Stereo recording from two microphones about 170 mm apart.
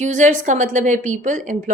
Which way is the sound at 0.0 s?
50° right (ahead or behind).